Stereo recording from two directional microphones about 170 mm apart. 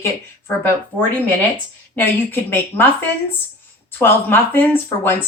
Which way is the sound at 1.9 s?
15° left (ahead or behind).